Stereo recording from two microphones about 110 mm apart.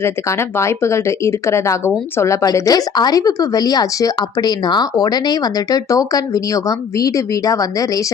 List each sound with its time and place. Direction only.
0.0 s speech: 25° left (ahead or behind)